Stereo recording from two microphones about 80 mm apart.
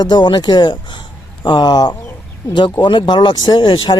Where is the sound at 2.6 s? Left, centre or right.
Left.